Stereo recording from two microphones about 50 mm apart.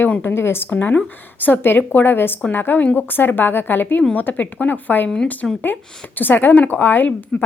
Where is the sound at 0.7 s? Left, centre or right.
Left.